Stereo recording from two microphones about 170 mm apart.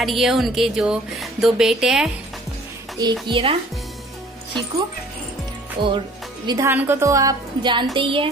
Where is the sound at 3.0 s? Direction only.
25° right (ahead or behind).